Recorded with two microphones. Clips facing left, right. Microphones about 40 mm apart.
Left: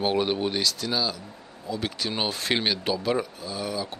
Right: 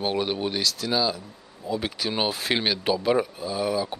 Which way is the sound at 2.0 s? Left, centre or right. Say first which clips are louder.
Right 2 dB; centre.